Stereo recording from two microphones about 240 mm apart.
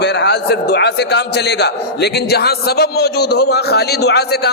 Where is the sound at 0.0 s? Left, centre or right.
Left.